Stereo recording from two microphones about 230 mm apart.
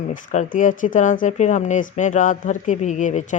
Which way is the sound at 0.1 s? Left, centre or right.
Left.